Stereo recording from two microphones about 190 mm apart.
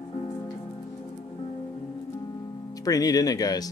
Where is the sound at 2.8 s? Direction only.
20° left (ahead or behind).